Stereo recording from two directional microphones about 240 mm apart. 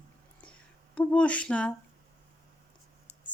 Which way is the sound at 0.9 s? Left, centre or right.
Centre.